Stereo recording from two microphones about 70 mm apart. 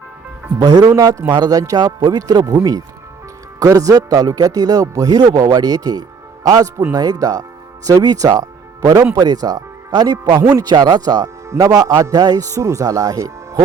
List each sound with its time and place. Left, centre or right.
0.6 s speech: right
0.9 s a man's voice: right
1.3 s speech: right
3.6 s a man's voice: right
11.5 s a man's voice: right